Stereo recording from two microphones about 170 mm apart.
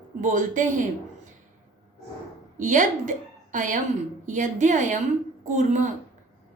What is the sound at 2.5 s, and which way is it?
A woman's voice, 50° right (ahead or behind).